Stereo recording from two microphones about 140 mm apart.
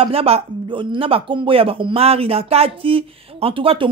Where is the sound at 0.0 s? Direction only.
45° right (ahead or behind).